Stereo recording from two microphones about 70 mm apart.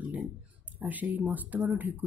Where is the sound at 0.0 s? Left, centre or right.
Right.